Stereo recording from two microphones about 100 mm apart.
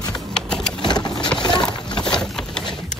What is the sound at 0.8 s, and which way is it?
Vehicle, 50° left (ahead or behind).